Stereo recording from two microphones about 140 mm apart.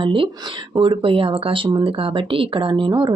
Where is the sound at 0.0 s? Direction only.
35° right (ahead or behind).